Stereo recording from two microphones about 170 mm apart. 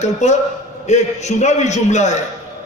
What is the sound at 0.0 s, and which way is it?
A man's voice, 45° left (ahead or behind).